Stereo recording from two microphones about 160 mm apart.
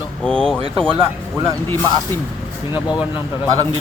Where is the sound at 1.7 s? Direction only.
15° left (ahead or behind).